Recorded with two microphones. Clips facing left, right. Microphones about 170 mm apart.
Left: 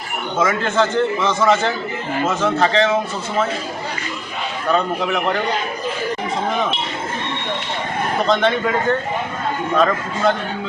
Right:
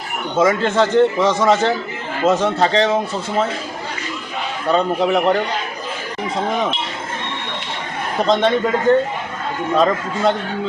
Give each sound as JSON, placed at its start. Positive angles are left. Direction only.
{"t": 0.3, "sound": "a man's voice", "side_deg": -30}
{"t": 4.7, "sound": "a man's voice", "side_deg": -35}
{"t": 8.3, "sound": "a man's voice", "side_deg": -30}